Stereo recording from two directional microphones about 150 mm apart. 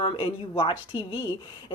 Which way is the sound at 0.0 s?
35° left (ahead or behind).